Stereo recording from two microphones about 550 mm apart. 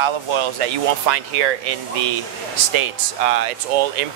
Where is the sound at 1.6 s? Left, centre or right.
Right.